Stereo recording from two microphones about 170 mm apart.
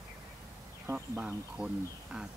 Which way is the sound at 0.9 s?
10° right (ahead or behind).